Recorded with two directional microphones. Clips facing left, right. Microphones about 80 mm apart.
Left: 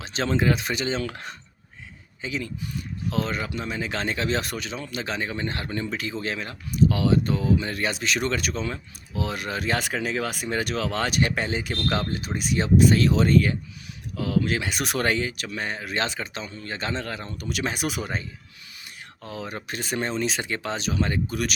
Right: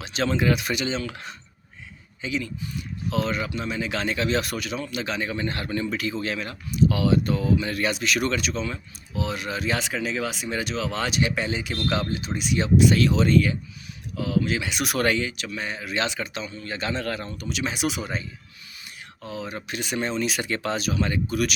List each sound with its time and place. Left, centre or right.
0.0 s speech: left
0.9 s speech: left
8.4 s speech: left
14.2 s speech: left
17.5 s speech: left; by 20.7 s centre
20.7 s speech: left